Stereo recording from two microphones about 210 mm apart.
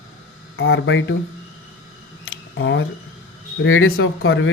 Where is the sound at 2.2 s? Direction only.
65° left (ahead or behind).